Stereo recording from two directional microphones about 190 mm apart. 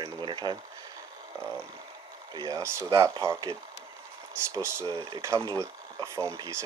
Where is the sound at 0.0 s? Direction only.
25° right (ahead or behind).